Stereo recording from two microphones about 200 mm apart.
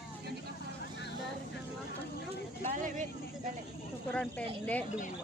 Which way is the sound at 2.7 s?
40° right (ahead or behind).